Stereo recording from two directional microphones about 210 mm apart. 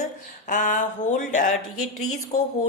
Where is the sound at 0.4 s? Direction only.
35° left (ahead or behind).